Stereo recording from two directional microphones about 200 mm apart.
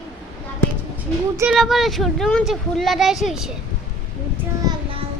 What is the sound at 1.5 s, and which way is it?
Speech, centre (ahead or behind).